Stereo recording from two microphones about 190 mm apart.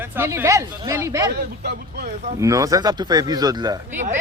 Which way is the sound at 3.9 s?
40° right (ahead or behind).